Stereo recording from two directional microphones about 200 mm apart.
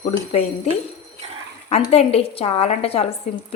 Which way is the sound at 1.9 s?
30° left (ahead or behind).